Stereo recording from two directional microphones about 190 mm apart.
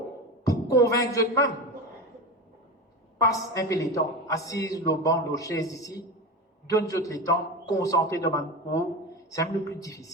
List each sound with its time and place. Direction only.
0.4 s speech: 20° left (ahead or behind)
3.2 s a man's voice: 15° left (ahead or behind)